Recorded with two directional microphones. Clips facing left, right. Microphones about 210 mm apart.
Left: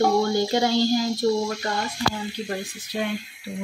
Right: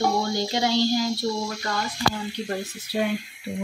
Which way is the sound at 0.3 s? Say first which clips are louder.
Left 3 dB; 50° left (ahead or behind).